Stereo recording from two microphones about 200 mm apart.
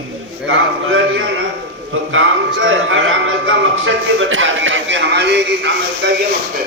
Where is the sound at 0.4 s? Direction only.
75° right (ahead or behind); by 6.2 s 60° right (ahead or behind).